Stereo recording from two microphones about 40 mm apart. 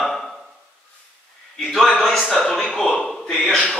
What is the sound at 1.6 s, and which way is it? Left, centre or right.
Speech, centre.